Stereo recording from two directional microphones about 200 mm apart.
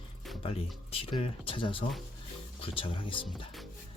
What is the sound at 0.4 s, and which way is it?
Speech, 30° left (ahead or behind).